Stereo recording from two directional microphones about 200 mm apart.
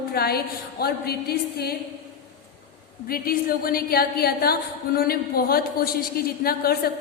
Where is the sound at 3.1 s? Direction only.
45° left (ahead or behind).